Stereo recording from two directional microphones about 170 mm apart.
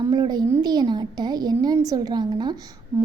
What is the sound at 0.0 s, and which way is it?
A woman's voice, 25° right (ahead or behind).